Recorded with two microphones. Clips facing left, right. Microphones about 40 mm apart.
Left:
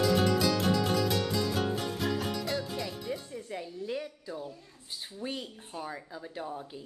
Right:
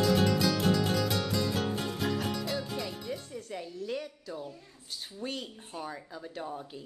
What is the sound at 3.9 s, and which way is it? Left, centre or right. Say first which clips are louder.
A woman's voice: left 1 dB; centre.